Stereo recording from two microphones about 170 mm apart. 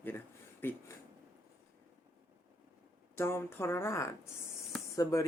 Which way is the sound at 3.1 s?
15° left (ahead or behind).